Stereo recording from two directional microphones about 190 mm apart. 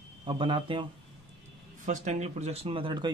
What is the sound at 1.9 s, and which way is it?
A man's voice, 35° right (ahead or behind).